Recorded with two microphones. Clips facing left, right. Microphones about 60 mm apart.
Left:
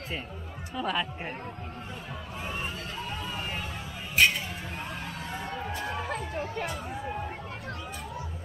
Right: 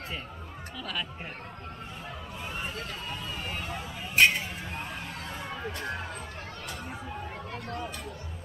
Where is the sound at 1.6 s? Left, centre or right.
Centre.